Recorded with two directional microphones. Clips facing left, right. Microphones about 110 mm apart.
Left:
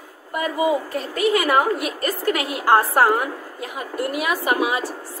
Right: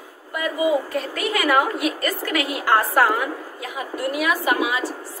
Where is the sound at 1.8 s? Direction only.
40° left (ahead or behind).